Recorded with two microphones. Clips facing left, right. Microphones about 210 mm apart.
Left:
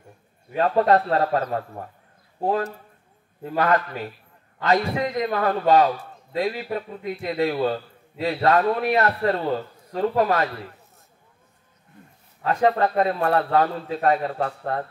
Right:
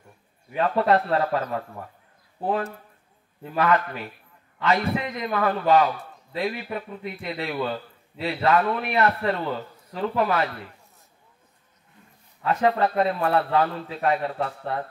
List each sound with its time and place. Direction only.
0.6 s a man's voice: 35° left (ahead or behind)
3.5 s a man's voice: 35° left (ahead or behind)
12.4 s a man's voice: 40° left (ahead or behind)